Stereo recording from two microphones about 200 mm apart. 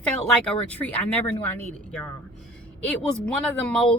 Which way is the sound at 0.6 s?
10° left (ahead or behind).